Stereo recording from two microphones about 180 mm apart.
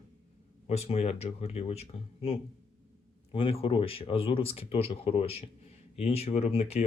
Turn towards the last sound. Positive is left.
turn(degrees=35)  # may be behind; listen again after turning